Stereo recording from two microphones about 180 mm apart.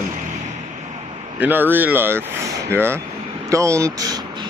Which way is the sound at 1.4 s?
10° right (ahead or behind).